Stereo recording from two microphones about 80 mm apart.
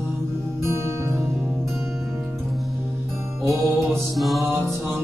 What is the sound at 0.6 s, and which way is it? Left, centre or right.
Music, right.